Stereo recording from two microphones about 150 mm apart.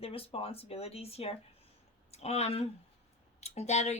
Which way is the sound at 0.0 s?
40° left (ahead or behind).